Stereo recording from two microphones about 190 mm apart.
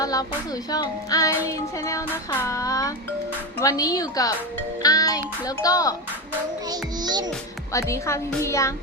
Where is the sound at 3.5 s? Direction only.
20° left (ahead or behind).